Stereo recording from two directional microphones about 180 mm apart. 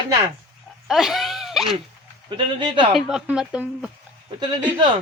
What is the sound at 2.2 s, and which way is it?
Speech, 25° right (ahead or behind).